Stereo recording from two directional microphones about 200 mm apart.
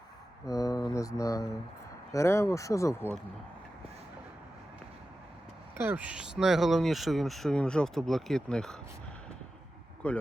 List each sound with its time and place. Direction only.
0.4 s mantra: 15° left (ahead or behind)
2.1 s speech: 15° left (ahead or behind)
5.7 s speech: 10° right (ahead or behind)
10.0 s speech: 5° left (ahead or behind)